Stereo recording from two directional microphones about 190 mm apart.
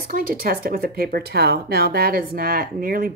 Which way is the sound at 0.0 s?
50° right (ahead or behind).